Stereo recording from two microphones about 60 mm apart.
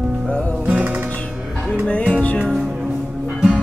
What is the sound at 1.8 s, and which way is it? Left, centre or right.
Music, centre.